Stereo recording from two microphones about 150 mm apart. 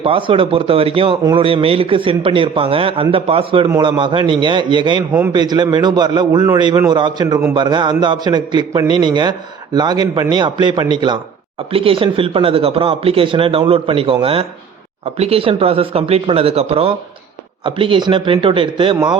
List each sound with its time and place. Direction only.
0.0 s a man's voice: 35° right (ahead or behind)